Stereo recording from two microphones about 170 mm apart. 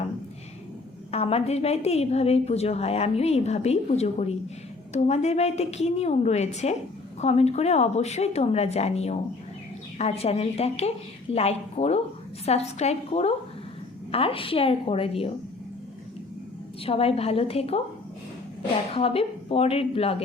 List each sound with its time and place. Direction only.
1.1 s a woman's voice: 35° left (ahead or behind)
16.8 s a woman's voice: 35° left (ahead or behind)
18.9 s a woman's voice: 35° left (ahead or behind)